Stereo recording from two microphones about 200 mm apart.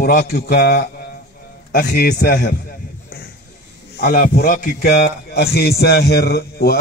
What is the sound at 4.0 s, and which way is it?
A man's voice, 50° left (ahead or behind).